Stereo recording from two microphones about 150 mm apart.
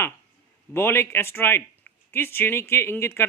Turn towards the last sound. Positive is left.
turn(degrees=15)  # may be behind; listen again after turning